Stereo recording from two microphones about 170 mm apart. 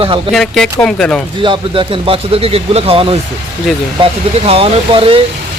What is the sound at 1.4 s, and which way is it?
Speech, 30° right (ahead or behind).